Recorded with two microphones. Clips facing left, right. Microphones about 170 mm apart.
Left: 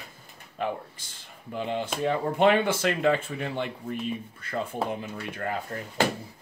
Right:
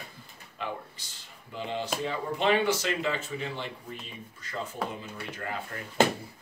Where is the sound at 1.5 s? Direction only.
55° left (ahead or behind).